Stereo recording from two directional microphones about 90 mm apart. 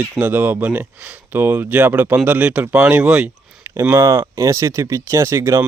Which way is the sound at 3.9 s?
35° right (ahead or behind).